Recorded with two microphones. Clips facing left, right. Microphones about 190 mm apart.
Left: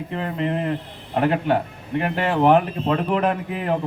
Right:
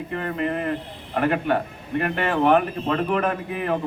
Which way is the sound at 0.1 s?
25° left (ahead or behind).